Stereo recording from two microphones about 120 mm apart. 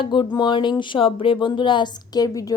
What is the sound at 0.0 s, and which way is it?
Music, 40° left (ahead or behind).